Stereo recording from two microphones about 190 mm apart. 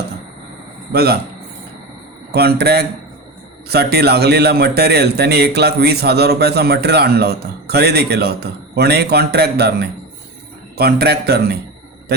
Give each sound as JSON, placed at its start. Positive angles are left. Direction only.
{"t": 0.9, "sound": "a man's voice", "side_deg": -55}
{"t": 2.3, "sound": "a man's voice", "side_deg": -55}